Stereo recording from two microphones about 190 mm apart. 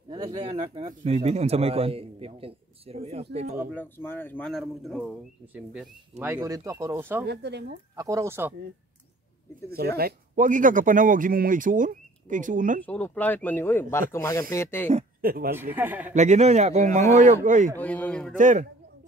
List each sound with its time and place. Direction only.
0.1 s a man's voice: 25° right (ahead or behind)
3.7 s speech: 10° left (ahead or behind); by 7.2 s 10° right (ahead or behind)
7.2 s speech: 60° right (ahead or behind)
7.9 s speech: 15° right (ahead or behind)
9.7 s speech: 55° right (ahead or behind)
12.8 s speech: 10° left (ahead or behind)
15.2 s speech: 50° right (ahead or behind)
15.5 s speech: 10° right (ahead or behind)
16.1 s a man's voice: 40° right (ahead or behind)
17.7 s speech: 10° left (ahead or behind)
18.4 s a man's voice: 40° right (ahead or behind)